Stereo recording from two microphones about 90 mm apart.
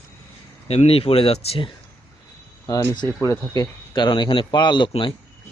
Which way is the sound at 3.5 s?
50° left (ahead or behind).